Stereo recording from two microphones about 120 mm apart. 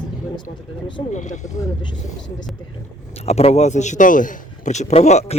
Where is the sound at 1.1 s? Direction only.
85° left.